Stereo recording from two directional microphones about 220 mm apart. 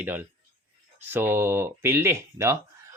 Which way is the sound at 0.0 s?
10° right (ahead or behind).